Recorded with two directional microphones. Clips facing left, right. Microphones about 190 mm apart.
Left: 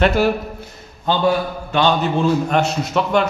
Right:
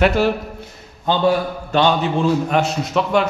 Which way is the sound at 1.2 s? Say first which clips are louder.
Right 1 dB; 30° right (ahead or behind).